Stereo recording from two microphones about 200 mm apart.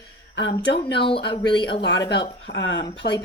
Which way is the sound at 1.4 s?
20° left (ahead or behind).